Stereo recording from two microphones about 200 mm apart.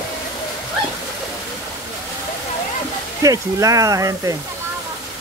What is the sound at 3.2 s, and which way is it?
Speech, 15° right (ahead or behind).